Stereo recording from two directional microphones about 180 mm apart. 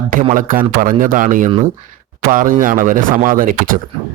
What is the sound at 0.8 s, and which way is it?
Speech, 50° right (ahead or behind).